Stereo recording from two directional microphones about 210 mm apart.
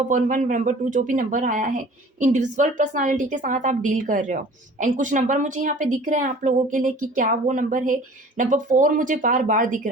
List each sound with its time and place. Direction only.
0.1 s speech: 35° right (ahead or behind)